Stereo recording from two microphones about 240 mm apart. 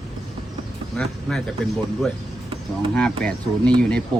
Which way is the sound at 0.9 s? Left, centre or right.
Centre.